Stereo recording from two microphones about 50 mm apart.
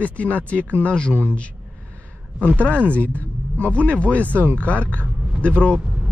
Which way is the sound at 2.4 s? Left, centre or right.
Right.